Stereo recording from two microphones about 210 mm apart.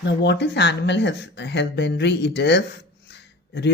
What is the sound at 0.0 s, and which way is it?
Speech, 55° left (ahead or behind).